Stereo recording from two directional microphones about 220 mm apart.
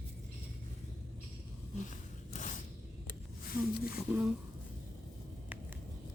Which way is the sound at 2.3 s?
35° left (ahead or behind).